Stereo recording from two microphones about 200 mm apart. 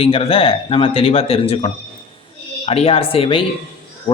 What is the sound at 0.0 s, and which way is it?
A man's voice, 30° left (ahead or behind).